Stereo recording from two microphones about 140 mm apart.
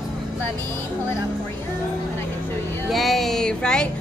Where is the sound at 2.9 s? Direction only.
Centre (ahead or behind).